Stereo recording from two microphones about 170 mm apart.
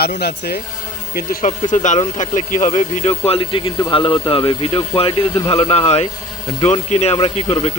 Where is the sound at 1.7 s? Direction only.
45° left (ahead or behind).